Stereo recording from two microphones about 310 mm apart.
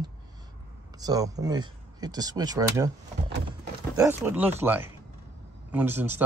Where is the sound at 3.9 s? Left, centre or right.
Centre.